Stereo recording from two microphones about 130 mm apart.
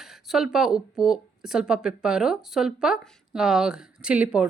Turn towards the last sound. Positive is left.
turn(degrees=-10)  # may be behind; listen again after turning